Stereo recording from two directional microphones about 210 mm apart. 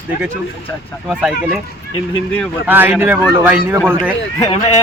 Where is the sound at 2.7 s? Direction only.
10° right (ahead or behind).